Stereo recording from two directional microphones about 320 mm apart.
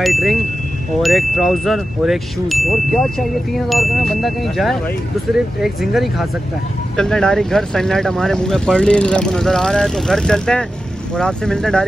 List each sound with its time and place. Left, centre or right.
0.0 s speech: centre